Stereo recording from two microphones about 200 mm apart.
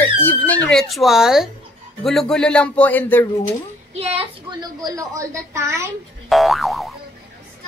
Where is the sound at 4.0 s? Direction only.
30° right (ahead or behind).